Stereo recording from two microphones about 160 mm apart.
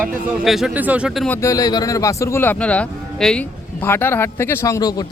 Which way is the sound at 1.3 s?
20° left (ahead or behind).